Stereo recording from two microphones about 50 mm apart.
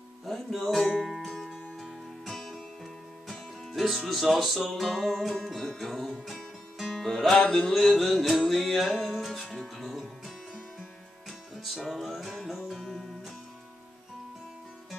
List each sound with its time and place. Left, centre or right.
0.3 s music: centre
2.2 s music: centre
7.3 s music: centre
7.7 s music: centre